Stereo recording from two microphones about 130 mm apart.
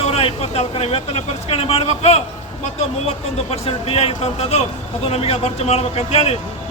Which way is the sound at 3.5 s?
50° left (ahead or behind).